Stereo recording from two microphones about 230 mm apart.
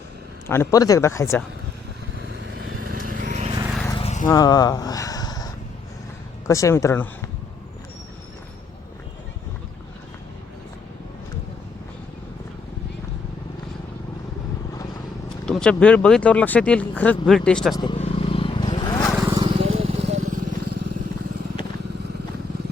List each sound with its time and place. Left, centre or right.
0.4 s speech: centre
2.9 s vehicle: right
3.8 s vehicle: left
4.3 s speech: centre
6.5 s speech: centre
15.4 s speech: centre
17.7 s vehicle: left
19.3 s vehicle: right
20.2 s vehicle: right